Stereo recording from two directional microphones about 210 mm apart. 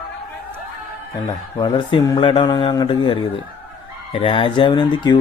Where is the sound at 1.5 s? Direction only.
20° left (ahead or behind).